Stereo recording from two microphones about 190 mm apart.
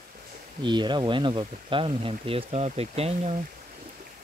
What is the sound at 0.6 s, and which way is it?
Speech, 25° right (ahead or behind).